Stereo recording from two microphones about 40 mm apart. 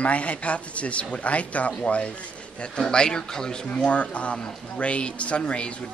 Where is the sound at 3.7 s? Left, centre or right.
Left.